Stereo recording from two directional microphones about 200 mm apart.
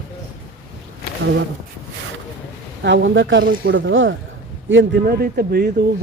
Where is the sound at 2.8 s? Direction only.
65° right (ahead or behind).